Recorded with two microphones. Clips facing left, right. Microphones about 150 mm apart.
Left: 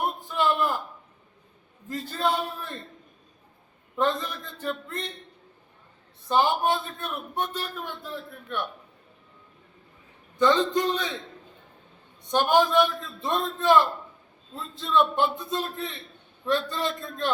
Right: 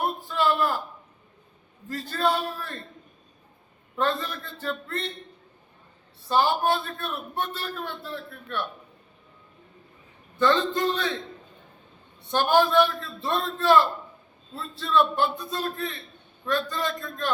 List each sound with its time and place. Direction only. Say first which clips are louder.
0.0 s a sound: right 1 dB; 20° left (ahead or behind)
1.9 s a man's voice: right 1 dB; 20° left (ahead or behind)
3.9 s a man's voice: left 1 dB; 15° left (ahead or behind)
6.2 s a man's voice: even; 15° left (ahead or behind)
10.3 s a man's voice: left 1 dB; 15° left (ahead or behind)
12.2 s a man's voice: even; 15° left (ahead or behind)